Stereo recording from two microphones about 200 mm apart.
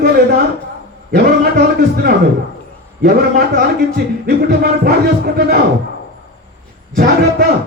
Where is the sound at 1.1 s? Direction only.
50° right (ahead or behind).